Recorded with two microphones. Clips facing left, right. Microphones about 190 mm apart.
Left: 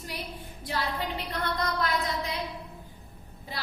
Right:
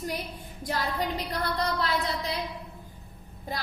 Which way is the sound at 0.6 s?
45° right (ahead or behind).